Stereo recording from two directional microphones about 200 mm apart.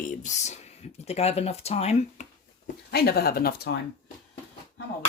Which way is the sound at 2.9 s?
50° left (ahead or behind).